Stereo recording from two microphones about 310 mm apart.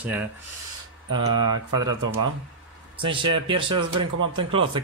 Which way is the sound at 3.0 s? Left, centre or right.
Centre.